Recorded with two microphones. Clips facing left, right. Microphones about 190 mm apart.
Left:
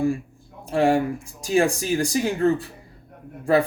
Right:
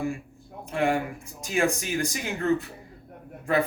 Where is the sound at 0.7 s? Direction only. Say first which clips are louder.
Left 6 dB; 35° left (ahead or behind).